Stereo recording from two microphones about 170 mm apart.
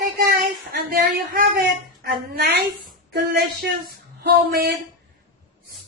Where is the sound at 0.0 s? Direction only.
55° right (ahead or behind).